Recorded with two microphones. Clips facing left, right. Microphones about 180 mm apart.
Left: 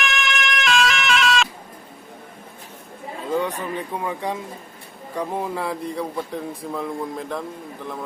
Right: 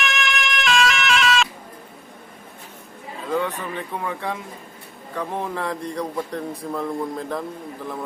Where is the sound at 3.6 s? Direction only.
15° left (ahead or behind).